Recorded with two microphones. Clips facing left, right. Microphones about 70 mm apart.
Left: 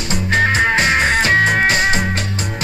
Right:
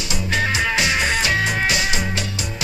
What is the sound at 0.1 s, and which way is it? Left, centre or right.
Music, left.